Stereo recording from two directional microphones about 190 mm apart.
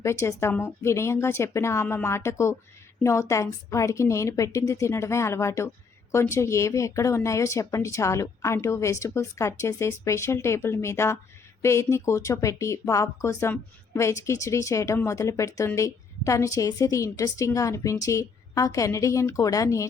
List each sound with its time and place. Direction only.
0.0 s speech: 15° left (ahead or behind)